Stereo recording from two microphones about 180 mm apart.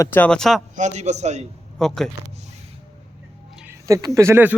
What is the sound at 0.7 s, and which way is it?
Speech, 40° right (ahead or behind).